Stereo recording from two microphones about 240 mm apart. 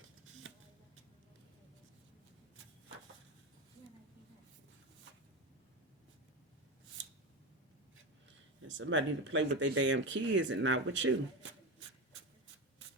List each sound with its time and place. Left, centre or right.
8.6 s speech: right